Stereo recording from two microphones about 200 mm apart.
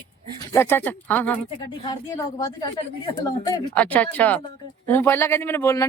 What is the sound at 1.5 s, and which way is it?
Speech, 20° left (ahead or behind).